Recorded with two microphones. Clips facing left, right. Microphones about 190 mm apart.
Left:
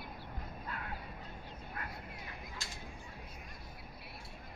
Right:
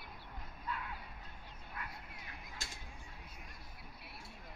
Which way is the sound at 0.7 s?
50° left (ahead or behind).